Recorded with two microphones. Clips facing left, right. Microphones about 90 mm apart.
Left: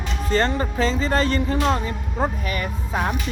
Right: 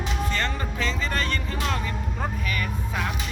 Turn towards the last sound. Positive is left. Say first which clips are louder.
# left 4 dB
turn(degrees=30)  # may be behind; listen again after turning